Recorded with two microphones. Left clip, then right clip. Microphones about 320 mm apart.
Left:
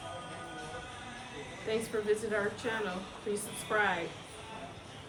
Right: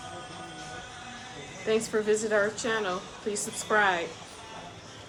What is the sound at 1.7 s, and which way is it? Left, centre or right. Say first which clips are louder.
A woman's voice: right 6 dB; centre.